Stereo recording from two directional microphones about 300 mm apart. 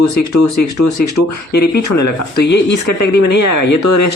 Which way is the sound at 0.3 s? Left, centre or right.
Left.